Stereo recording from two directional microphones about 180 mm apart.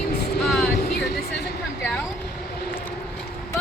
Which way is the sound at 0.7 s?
55° left (ahead or behind).